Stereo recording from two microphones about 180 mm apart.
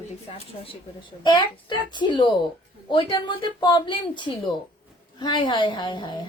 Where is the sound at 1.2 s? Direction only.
25° left (ahead or behind).